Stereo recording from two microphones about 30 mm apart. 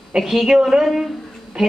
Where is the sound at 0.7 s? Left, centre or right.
Right.